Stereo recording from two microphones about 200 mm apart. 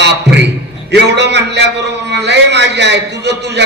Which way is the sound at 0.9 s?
60° right (ahead or behind).